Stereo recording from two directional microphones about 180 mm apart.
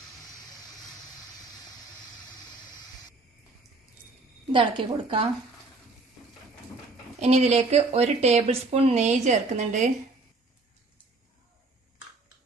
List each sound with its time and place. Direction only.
4.5 s a woman's voice: 30° right (ahead or behind)
7.2 s speech: 35° right (ahead or behind)